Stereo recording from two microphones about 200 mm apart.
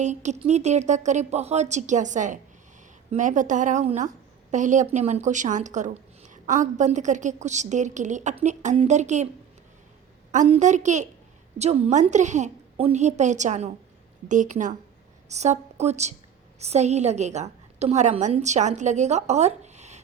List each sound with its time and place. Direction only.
0.0 s a woman's voice: 35° right (ahead or behind)
10.3 s a woman's voice: 35° right (ahead or behind)